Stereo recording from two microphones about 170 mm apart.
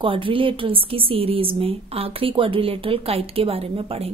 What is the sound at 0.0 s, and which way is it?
A woman's voice, 30° right (ahead or behind).